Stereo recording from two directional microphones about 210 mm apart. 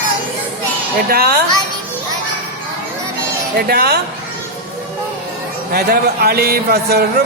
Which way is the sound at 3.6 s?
45° right (ahead or behind).